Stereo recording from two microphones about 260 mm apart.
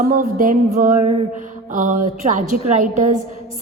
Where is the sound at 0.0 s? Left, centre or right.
Right.